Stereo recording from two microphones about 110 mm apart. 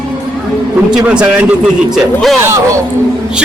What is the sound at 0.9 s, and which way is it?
Speech, 10° right (ahead or behind).